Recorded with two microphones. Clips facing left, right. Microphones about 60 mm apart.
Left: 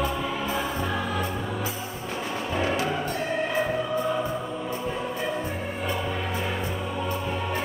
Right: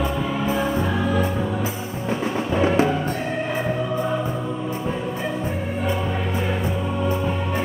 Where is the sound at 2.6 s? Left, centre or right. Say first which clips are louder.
Right 8 dB; right.